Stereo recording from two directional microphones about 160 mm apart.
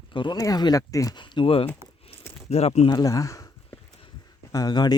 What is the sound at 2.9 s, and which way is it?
Speech, 20° left (ahead or behind).